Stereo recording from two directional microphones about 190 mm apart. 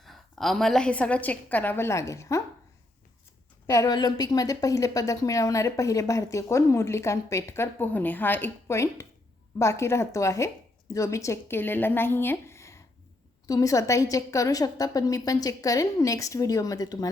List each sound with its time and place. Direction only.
0.0 s a woman's voice: centre (ahead or behind); by 2.4 s 15° left (ahead or behind)
3.7 s a woman's voice: 20° left (ahead or behind)